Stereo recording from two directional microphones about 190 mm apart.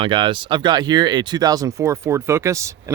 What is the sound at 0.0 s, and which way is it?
Speech, 25° right (ahead or behind).